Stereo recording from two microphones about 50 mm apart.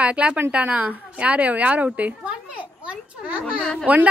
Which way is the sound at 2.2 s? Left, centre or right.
Right.